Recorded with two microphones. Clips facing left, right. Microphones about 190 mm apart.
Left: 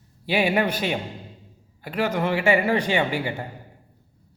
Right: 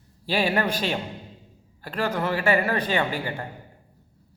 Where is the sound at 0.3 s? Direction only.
10° left (ahead or behind).